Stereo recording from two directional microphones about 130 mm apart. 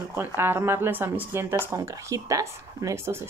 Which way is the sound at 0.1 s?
15° right (ahead or behind).